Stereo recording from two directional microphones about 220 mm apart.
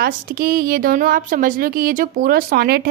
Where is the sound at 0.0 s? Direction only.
40° right (ahead or behind).